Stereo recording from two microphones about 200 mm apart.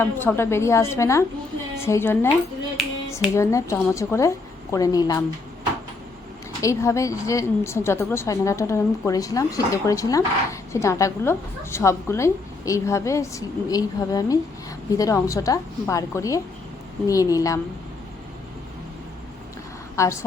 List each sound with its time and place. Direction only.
0.0 s a woman's voice: 10° left (ahead or behind)
3.3 s a woman's voice: 15° left (ahead or behind)
6.6 s a woman's voice: 15° left (ahead or behind)
20.0 s a woman's voice: 15° left (ahead or behind)